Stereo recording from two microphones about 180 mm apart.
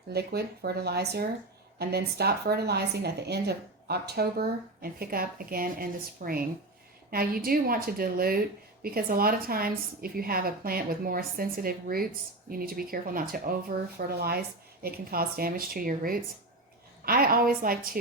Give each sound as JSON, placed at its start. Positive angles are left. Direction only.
{"t": 0.1, "sound": "a woman's voice", "side_deg": -65}